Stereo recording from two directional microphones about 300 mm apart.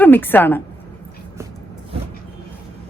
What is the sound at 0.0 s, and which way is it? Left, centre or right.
Speech, centre.